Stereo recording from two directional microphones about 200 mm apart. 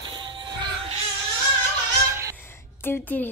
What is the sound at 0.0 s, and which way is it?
Music, 25° right (ahead or behind).